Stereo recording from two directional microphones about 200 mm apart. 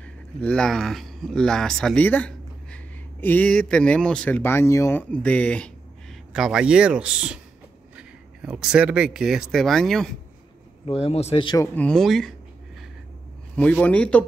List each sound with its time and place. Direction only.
0.4 s speech: 5° left (ahead or behind)
8.4 s speech: 5° right (ahead or behind)
10.9 s speech: 30° left (ahead or behind)
11.6 s speech: 5° left (ahead or behind)
13.6 s a man's voice: 5° left (ahead or behind)